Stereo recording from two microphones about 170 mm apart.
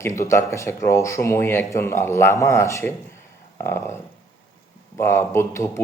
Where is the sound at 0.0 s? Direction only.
15° left (ahead or behind).